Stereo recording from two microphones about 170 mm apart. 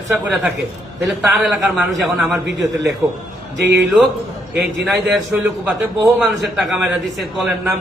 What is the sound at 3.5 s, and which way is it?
Speech, 90° right.